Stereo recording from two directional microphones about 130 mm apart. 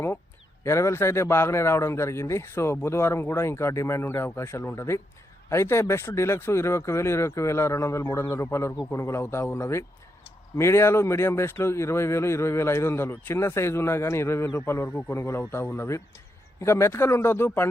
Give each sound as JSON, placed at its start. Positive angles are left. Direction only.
{"t": 0.6, "sound": "speech", "side_deg": 20}